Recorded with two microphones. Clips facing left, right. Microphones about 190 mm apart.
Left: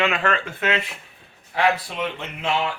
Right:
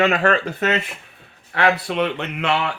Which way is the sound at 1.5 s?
70° right (ahead or behind).